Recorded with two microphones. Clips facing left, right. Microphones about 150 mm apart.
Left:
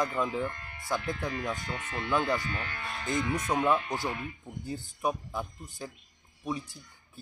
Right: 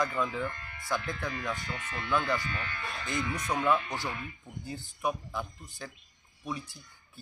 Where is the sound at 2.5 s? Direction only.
40° left (ahead or behind); by 4.1 s 15° left (ahead or behind).